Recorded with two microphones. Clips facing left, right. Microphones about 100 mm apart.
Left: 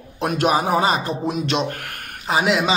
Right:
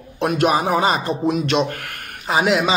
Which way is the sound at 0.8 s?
40° right (ahead or behind).